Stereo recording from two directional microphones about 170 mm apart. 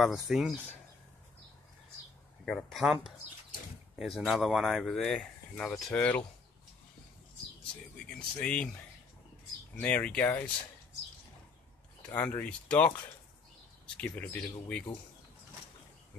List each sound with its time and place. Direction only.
0.0 s speech: centre (ahead or behind)
2.4 s speech: centre (ahead or behind)
8.4 s speech: 5° left (ahead or behind)
9.8 s speech: 5° left (ahead or behind)
12.1 s speech: 10° left (ahead or behind)
13.9 s speech: 10° left (ahead or behind)